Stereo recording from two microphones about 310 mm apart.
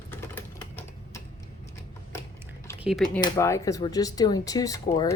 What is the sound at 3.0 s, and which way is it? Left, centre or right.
Speech, centre.